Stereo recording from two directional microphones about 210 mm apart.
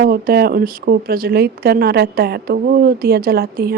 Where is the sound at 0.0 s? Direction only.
45° right (ahead or behind).